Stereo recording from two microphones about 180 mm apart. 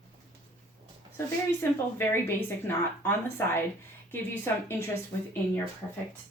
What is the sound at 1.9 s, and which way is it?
Speech, 10° left (ahead or behind).